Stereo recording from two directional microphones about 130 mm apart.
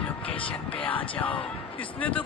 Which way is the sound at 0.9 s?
10° left (ahead or behind).